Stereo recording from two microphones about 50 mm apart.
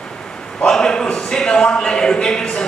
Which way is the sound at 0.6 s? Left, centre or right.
Centre.